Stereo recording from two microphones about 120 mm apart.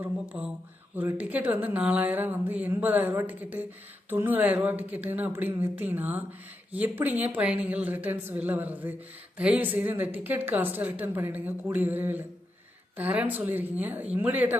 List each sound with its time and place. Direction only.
0.0 s a woman's voice: 10° right (ahead or behind)